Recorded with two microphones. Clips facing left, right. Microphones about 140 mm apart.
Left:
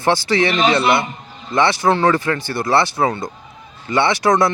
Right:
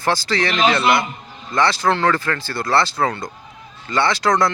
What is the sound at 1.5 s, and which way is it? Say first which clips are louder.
Speech: left 2 dB; 25° left (ahead or behind).